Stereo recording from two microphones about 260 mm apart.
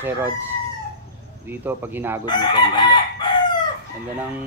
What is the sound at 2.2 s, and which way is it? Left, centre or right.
Chicken, centre.